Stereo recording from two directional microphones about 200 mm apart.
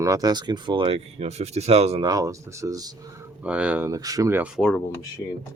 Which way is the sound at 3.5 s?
5° right (ahead or behind).